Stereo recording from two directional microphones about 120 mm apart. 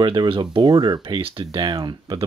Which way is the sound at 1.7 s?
40° right (ahead or behind).